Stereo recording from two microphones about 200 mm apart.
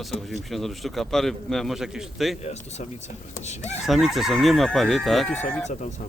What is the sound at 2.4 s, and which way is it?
Speech, 35° left (ahead or behind).